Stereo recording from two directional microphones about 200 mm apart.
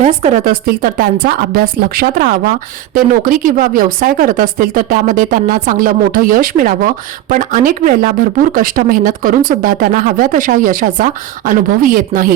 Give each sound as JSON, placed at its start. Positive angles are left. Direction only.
{"t": 0.0, "sound": "speech", "side_deg": -35}